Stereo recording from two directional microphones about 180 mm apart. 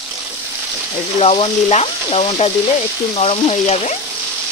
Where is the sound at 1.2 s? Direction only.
35° left (ahead or behind).